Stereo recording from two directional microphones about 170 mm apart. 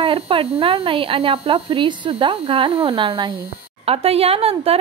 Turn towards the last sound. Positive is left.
turn(degrees=-35)  # may be behind; listen again after turning